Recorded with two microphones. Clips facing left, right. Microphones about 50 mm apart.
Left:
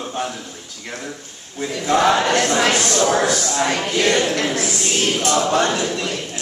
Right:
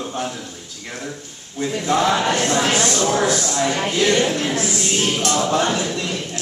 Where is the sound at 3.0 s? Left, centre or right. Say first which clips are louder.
Left 2 dB; left.